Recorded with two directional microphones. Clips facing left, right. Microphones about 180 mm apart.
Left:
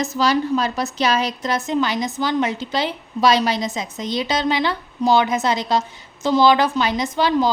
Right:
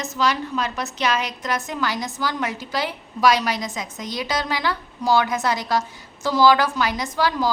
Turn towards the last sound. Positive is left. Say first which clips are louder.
# left 4 dB
turn(degrees=25)  # may be behind; listen again after turning